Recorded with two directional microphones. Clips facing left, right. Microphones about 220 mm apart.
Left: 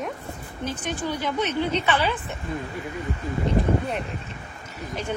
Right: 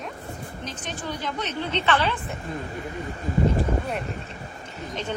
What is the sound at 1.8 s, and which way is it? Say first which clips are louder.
Speech: even; 10° left (ahead or behind).